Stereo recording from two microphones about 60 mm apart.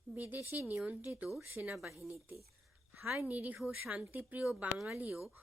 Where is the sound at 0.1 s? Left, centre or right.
Right.